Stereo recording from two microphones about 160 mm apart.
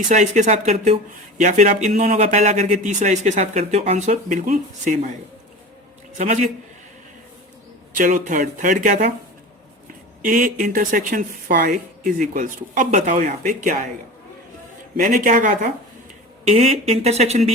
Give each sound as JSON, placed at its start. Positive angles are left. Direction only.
{"t": 0.1, "sound": "speech", "side_deg": -50}
{"t": 6.1, "sound": "speech", "side_deg": -50}
{"t": 7.9, "sound": "speech", "side_deg": -55}
{"t": 10.2, "sound": "speech", "side_deg": -55}
{"t": 14.9, "sound": "speech", "side_deg": -60}
{"t": 16.4, "sound": "speech", "side_deg": -40}